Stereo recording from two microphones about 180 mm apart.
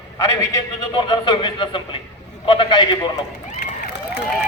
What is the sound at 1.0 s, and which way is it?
A man's voice, 25° left (ahead or behind).